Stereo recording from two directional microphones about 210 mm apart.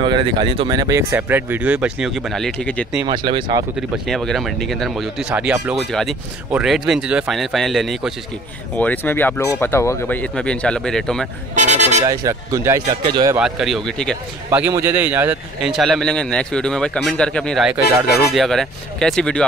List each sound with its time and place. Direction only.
0.0 s speech: 25° right (ahead or behind); by 2.9 s 5° left (ahead or behind)
3.1 s speech: 20° right (ahead or behind)
3.9 s speech: centre (ahead or behind)
11.5 s vehicle: 35° right (ahead or behind)
12.0 s speech: 15° right (ahead or behind)
13.4 s speech: centre (ahead or behind)
14.5 s speech: 10° right (ahead or behind)